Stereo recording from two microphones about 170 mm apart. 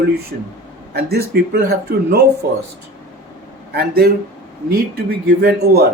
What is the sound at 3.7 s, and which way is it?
Speech, 70° right (ahead or behind).